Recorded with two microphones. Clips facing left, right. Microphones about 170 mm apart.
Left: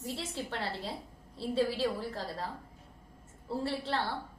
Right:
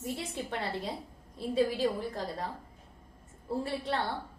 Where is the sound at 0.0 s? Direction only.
15° right (ahead or behind).